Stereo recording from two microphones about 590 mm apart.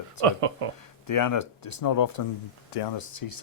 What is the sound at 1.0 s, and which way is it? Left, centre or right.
Speech, left.